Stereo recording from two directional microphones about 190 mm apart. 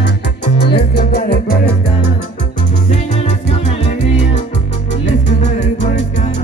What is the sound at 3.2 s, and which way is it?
Music, 35° left (ahead or behind).